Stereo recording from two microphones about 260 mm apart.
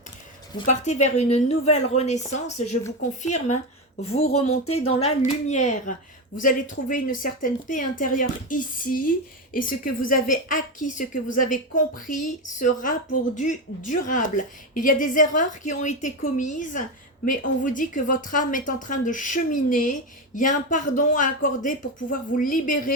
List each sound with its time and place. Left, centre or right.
0.6 s a woman's voice: left
4.3 s speech: left
4.9 s a woman's voice: left